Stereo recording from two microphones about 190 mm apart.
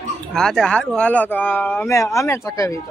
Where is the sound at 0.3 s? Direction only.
Centre (ahead or behind).